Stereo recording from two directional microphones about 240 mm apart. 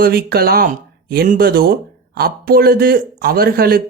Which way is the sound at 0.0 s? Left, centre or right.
Right.